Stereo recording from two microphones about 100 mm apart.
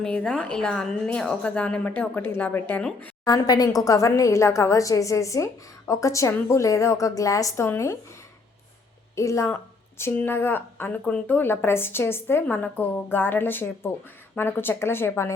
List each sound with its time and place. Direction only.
0.0 s a woman's voice: 10° left (ahead or behind)
3.2 s a woman's voice: 40° left (ahead or behind)
9.1 s a woman's voice: 30° left (ahead or behind)